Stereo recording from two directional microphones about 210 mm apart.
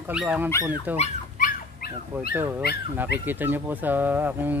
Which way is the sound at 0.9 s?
35° left (ahead or behind).